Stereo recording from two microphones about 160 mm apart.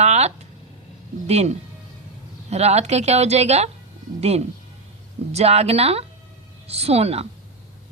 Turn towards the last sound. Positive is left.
turn(degrees=-40)  # may be behind; listen again after turning